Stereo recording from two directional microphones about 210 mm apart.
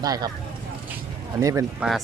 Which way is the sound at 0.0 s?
20° right (ahead or behind).